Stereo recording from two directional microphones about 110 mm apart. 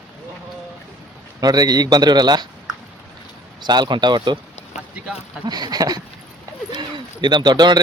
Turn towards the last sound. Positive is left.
turn(degrees=-40)  # may be behind; listen again after turning